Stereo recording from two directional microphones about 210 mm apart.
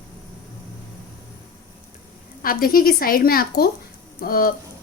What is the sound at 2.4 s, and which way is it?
A woman's voice, 45° left (ahead or behind).